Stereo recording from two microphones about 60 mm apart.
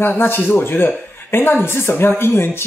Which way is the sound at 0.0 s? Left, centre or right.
Left.